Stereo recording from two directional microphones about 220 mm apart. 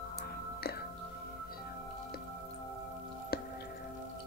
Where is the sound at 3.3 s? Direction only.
45° left (ahead or behind).